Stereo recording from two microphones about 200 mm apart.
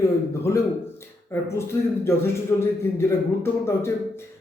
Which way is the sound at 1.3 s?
10° left (ahead or behind).